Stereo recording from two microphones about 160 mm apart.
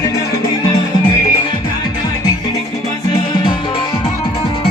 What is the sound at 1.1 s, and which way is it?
Music, 25° left (ahead or behind).